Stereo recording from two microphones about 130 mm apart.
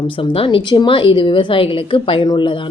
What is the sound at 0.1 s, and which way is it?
Speech, 45° left (ahead or behind).